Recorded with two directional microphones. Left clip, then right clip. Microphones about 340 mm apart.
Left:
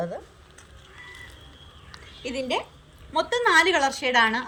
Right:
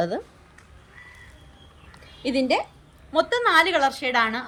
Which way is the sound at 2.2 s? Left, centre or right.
Centre.